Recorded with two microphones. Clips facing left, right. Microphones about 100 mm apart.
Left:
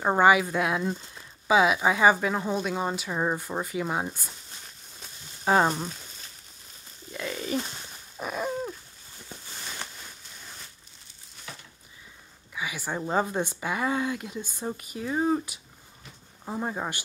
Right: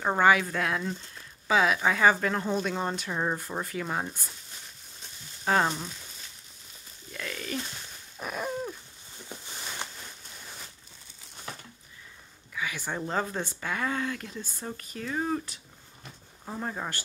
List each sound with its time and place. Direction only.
0.0 s speech: 15° left (ahead or behind)
5.4 s sizzle: 15° left (ahead or behind)
7.1 s speech: 20° left (ahead or behind)
8.2 s hoot: centre (ahead or behind)
11.5 s a sound: 40° right (ahead or behind)
12.5 s speech: 10° left (ahead or behind)